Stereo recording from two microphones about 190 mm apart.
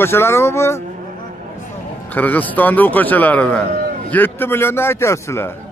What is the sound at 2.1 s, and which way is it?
Speech, 10° left (ahead or behind).